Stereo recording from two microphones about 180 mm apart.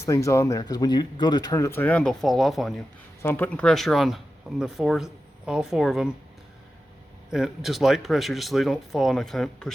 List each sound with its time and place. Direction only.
0.0 s speech: 15° left (ahead or behind); by 6.1 s centre (ahead or behind)
7.3 s speech: centre (ahead or behind)